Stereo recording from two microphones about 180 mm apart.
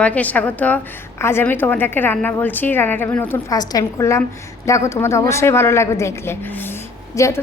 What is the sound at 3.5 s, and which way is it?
A woman's voice, 20° left (ahead or behind).